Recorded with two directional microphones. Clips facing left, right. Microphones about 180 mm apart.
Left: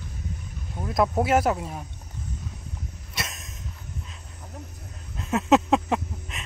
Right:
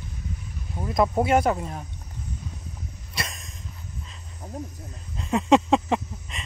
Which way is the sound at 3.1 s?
Centre (ahead or behind).